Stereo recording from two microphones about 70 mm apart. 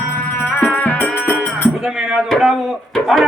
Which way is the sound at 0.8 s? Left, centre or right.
Left.